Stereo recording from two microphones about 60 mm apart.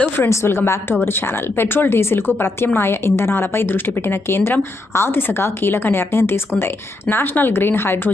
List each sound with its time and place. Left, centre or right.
0.2 s a woman's voice: left